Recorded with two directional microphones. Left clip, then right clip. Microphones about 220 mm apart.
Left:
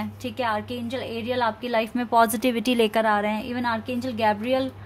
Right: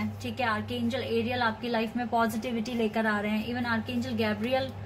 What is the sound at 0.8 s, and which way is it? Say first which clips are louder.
A woman's voice: left 1 dB; 45° left (ahead or behind).